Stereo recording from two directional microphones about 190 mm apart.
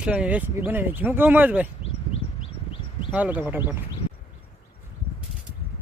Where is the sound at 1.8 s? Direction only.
30° left (ahead or behind).